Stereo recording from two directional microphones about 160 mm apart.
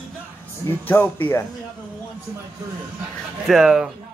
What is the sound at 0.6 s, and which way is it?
Speech, 10° left (ahead or behind).